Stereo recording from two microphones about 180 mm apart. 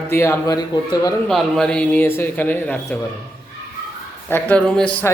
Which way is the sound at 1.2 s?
Centre (ahead or behind).